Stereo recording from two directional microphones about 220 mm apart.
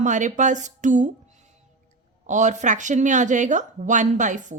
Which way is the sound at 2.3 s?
35° right (ahead or behind).